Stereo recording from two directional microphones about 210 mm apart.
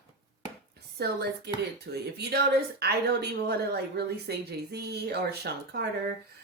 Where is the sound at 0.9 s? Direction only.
50° right (ahead or behind).